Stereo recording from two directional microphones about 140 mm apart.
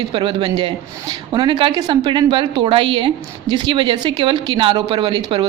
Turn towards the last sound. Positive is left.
turn(degrees=-30)  # may be behind; listen again after turning